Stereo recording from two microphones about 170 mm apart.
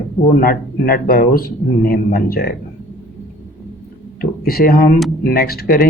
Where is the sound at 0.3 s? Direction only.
60° left (ahead or behind).